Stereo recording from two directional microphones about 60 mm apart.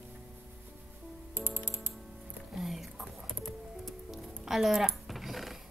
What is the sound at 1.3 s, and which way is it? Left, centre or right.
Music, right.